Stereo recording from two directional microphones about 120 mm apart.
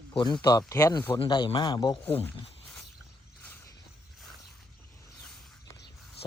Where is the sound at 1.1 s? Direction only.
45° left (ahead or behind).